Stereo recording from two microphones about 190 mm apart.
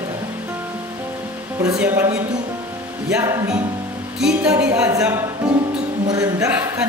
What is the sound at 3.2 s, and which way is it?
Speech, 15° right (ahead or behind).